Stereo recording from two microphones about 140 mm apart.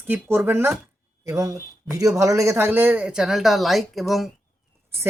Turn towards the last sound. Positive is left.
turn(degrees=0)  # may be behind; listen again after turning